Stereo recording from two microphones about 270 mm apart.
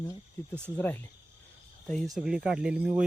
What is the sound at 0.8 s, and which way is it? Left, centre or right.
Speech, centre.